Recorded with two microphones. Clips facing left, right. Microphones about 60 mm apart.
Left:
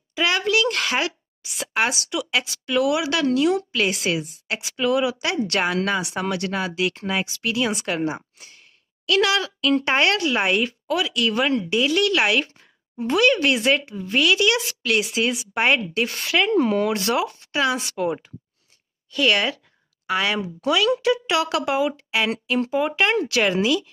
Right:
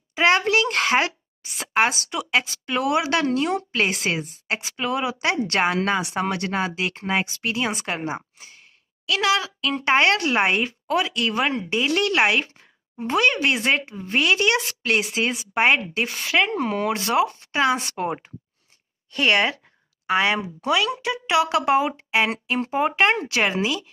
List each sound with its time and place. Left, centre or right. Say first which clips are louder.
0.1 s speech: right 3 dB; right
19.1 s speech: even; right